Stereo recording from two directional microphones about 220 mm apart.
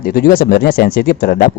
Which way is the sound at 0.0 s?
40° left (ahead or behind).